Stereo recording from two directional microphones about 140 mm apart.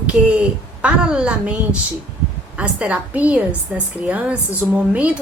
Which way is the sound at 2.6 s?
10° right (ahead or behind).